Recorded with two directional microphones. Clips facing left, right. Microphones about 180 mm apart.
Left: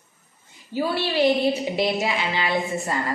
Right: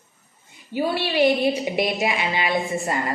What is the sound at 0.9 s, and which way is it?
A woman's voice, 15° right (ahead or behind).